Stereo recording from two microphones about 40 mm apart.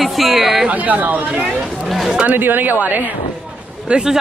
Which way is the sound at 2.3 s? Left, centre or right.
Right.